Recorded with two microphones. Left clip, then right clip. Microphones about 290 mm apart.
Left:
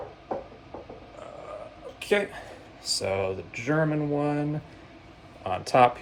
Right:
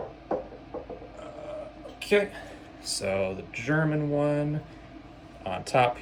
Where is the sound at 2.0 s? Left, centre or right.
Left.